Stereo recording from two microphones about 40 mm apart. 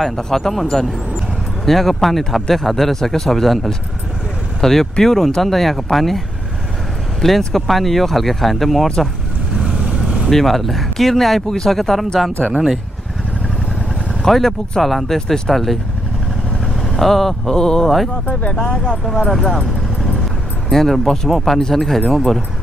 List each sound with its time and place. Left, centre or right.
0.0 s a man's voice: centre
1.7 s a man's voice: centre
9.6 s vehicle: right
10.3 s a man's voice: centre
14.2 s a man's voice: centre
15.1 s speech: centre
15.5 s a man's voice: centre
16.9 s speech: centre; by 18.9 s left
19.3 s speech: centre
20.7 s a man's voice: centre